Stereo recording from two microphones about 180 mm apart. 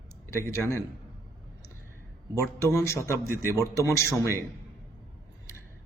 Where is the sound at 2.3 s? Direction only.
15° left (ahead or behind).